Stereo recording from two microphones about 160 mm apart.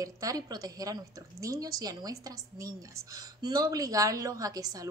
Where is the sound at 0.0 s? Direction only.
20° right (ahead or behind).